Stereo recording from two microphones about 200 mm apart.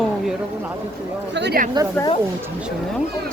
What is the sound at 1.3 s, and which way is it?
Speech, 55° right (ahead or behind).